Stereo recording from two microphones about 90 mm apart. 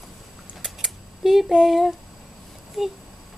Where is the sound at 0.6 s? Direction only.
5° right (ahead or behind).